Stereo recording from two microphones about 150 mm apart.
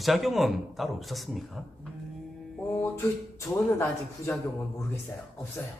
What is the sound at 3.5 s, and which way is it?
Speech, 20° left (ahead or behind).